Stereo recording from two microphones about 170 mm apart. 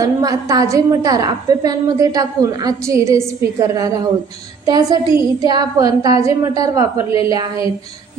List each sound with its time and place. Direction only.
0.0 s a woman's voice: 20° right (ahead or behind)